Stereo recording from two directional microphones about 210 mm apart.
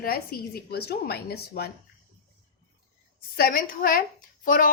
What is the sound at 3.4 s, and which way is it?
A woman's voice, 40° left (ahead or behind).